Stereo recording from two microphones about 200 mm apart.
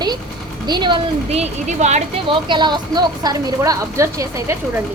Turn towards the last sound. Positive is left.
turn(degrees=-15)  # may be behind; listen again after turning